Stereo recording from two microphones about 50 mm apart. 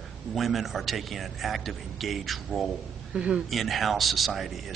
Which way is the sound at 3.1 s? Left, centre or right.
Centre.